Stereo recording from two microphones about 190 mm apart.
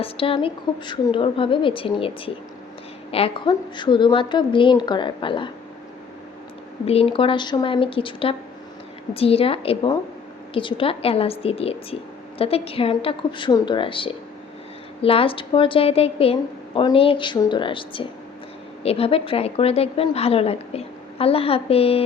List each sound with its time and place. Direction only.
0.0 s a woman's voice: 30° left (ahead or behind)
6.8 s a woman's voice: 30° left (ahead or behind)